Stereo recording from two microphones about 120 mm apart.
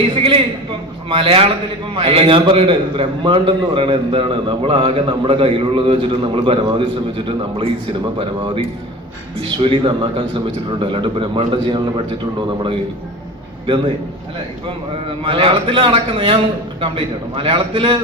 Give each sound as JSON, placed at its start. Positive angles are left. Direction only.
{"t": 0.2, "sound": "a sound", "side_deg": -50}
{"t": 2.0, "sound": "a man's voice", "side_deg": -50}
{"t": 7.3, "sound": "a man's voice", "side_deg": -50}
{"t": 15.2, "sound": "a man's voice", "side_deg": -45}